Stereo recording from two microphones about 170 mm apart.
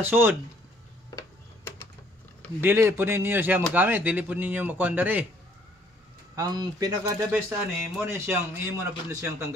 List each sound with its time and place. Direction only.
0.0 s a man's voice: 10° right (ahead or behind)
1.1 s tick-tock: 20° left (ahead or behind)
2.6 s a man's voice: 15° right (ahead or behind)
6.3 s a man's voice: 20° right (ahead or behind)